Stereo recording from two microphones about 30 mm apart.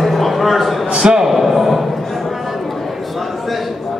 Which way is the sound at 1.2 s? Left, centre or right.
Centre.